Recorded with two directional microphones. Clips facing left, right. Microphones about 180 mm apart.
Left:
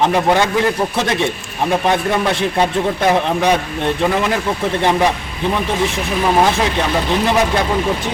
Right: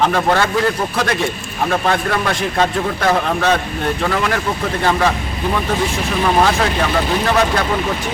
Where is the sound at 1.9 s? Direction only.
20° left (ahead or behind).